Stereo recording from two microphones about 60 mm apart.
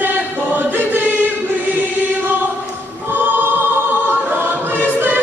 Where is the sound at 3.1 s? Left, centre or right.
Right.